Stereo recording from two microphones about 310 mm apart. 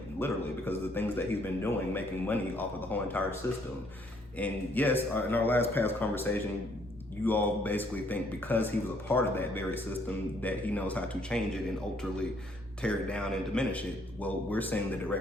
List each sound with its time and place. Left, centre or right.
0.2 s a man's voice: centre
12.8 s a man's voice: centre